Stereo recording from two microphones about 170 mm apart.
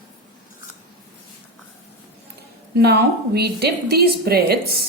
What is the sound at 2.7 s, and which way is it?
A woman's voice, 70° right (ahead or behind).